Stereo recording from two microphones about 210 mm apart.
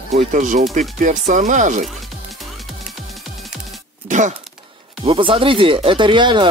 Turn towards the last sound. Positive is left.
turn(degrees=-20)  # may be behind; listen again after turning